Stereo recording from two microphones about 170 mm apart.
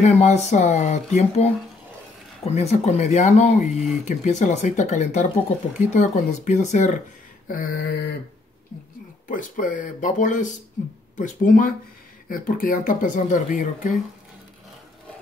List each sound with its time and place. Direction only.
0.0 s speech: 40° left (ahead or behind)
7.4 s mantra: 55° left (ahead or behind)
9.3 s speech: 50° left (ahead or behind)